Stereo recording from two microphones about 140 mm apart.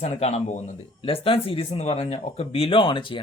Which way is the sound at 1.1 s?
40° left (ahead or behind).